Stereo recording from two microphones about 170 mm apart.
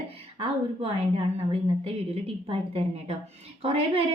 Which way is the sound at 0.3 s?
30° right (ahead or behind).